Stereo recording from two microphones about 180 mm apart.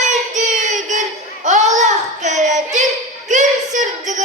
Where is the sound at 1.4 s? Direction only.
40° right (ahead or behind).